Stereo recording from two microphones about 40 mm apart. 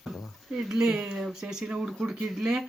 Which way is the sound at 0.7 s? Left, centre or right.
Centre.